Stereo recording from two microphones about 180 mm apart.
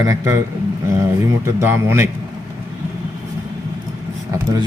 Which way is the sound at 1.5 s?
15° right (ahead or behind).